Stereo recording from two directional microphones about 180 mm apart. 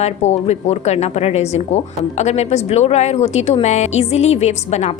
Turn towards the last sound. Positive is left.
turn(degrees=40)  # may be behind; listen again after turning